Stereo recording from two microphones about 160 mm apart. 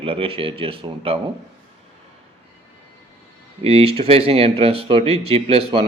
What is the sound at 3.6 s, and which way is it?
Speech, 40° right (ahead or behind).